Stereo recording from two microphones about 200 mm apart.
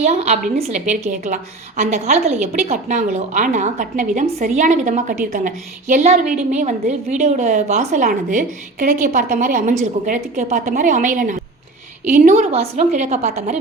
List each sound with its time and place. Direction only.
0.0 s a woman's voice: 35° right (ahead or behind)